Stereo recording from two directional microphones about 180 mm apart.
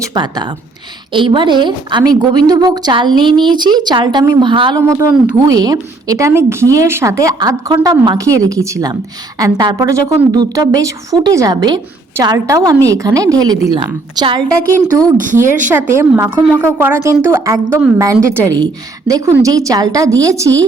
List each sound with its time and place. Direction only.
0.0 s a woman's voice: 20° right (ahead or behind)
4.8 s a woman's voice: 15° right (ahead or behind)
15.7 s a woman's voice: 15° right (ahead or behind)